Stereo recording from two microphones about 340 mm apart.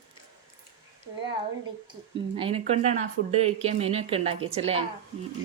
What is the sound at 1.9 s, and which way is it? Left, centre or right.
A child's voice, centre.